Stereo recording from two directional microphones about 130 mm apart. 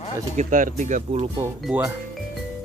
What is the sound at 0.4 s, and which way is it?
Speech, 90° right.